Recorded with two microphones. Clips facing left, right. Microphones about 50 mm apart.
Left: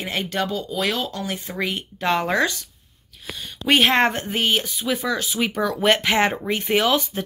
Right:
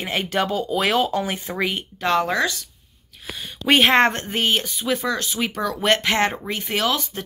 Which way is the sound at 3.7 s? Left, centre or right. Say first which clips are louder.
Right 2 dB; centre.